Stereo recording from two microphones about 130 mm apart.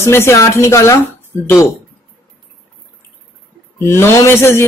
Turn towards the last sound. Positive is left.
turn(degrees=20)  # may be behind; listen again after turning